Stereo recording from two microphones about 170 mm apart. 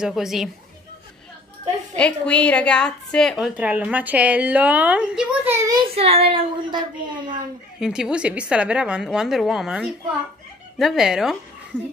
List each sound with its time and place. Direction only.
0.0 s a woman's voice: centre (ahead or behind)
2.0 s a woman's voice: 5° left (ahead or behind); by 5.9 s 20° right (ahead or behind)
5.9 s a woman's voice: 35° right (ahead or behind)
7.8 s a woman's voice: 5° right (ahead or behind)